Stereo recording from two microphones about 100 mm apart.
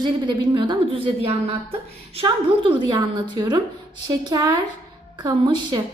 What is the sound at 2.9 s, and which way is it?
A woman's voice, 45° right (ahead or behind).